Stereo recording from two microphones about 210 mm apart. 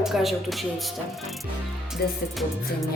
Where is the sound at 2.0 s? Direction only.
45° left (ahead or behind).